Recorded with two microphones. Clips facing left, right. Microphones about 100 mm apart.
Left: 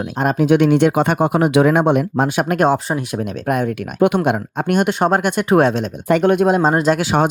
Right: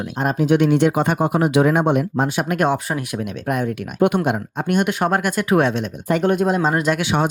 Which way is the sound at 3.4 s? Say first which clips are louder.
Left 3 dB; 55° left (ahead or behind).